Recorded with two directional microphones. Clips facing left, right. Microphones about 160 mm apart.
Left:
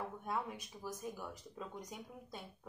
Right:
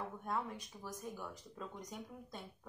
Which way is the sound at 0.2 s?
5° left (ahead or behind).